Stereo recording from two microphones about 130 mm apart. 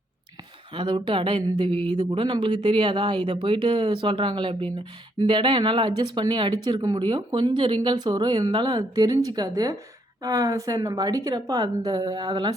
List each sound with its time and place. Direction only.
0.7 s a woman's voice: 40° right (ahead or behind)